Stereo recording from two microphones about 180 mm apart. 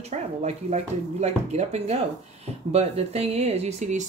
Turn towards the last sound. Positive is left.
turn(degrees=-40)  # may be behind; listen again after turning